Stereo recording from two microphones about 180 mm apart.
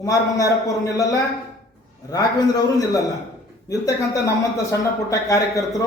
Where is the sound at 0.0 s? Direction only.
15° left (ahead or behind).